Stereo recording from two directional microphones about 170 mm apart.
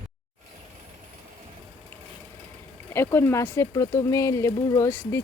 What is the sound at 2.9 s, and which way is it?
Speech, 15° left (ahead or behind).